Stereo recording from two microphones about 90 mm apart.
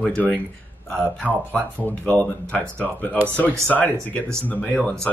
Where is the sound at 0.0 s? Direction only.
10° left (ahead or behind).